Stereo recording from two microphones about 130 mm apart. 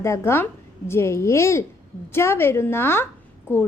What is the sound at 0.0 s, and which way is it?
A woman's voice, 20° left (ahead or behind).